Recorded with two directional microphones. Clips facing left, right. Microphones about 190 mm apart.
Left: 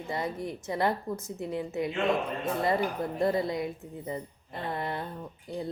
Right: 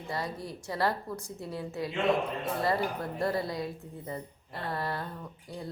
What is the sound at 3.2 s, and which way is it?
Speech, 20° left (ahead or behind).